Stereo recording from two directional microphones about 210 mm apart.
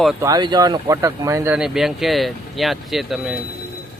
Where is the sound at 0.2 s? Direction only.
20° right (ahead or behind).